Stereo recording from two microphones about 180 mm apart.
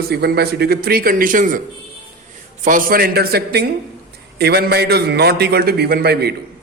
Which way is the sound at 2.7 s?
50° right (ahead or behind).